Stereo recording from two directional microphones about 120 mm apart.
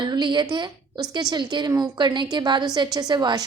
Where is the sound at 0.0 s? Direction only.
40° right (ahead or behind).